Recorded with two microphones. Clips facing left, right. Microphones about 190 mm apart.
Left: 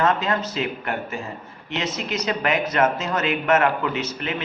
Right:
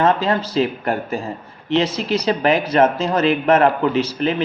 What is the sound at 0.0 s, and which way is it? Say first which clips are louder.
A man's voice: right 4 dB; 30° right (ahead or behind).